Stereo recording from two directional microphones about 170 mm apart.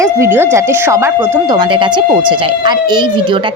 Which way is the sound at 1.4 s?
25° right (ahead or behind).